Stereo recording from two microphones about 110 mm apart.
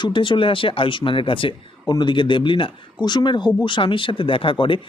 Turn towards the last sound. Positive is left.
turn(degrees=50)  # may be behind; listen again after turning